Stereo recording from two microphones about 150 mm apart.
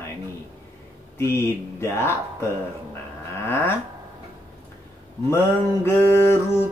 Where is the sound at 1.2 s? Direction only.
15° left (ahead or behind).